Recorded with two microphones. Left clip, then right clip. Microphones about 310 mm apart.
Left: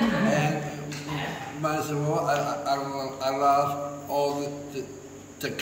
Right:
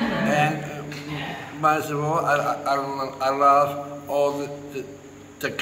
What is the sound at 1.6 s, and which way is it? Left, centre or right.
A man's voice, centre.